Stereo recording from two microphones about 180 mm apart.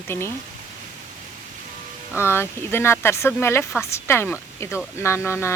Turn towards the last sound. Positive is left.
turn(degrees=15)  # may be behind; listen again after turning